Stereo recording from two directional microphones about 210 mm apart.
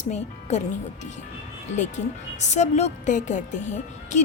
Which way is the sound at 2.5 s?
35° left (ahead or behind).